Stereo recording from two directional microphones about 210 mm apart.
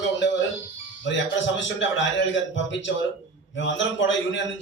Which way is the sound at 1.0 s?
60° left (ahead or behind).